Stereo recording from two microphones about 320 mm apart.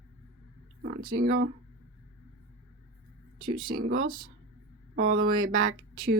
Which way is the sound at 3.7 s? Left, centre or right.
Right.